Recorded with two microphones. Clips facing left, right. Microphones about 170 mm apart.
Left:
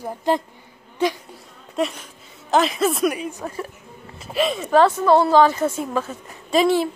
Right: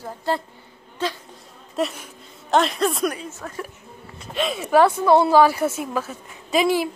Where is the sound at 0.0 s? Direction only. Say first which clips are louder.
Left 4 dB; 15° left (ahead or behind).